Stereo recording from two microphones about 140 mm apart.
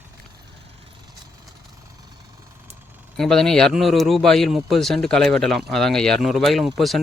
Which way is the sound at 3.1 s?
5° left (ahead or behind).